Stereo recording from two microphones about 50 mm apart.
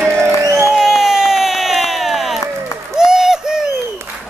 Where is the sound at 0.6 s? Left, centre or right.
Centre.